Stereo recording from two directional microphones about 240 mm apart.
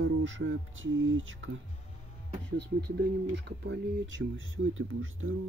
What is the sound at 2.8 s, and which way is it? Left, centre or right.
Speech, right.